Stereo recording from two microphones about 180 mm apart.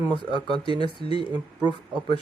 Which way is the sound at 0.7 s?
25° right (ahead or behind).